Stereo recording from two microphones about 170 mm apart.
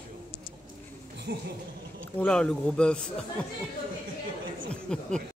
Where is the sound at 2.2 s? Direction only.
5° left (ahead or behind).